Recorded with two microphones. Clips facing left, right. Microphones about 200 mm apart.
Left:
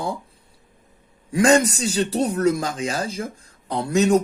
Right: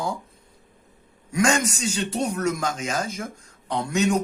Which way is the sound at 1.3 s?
35° left (ahead or behind).